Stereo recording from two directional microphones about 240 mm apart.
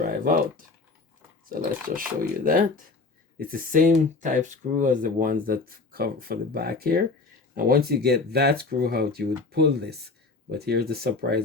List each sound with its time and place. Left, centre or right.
0.1 s speech: right
2.0 s speech: right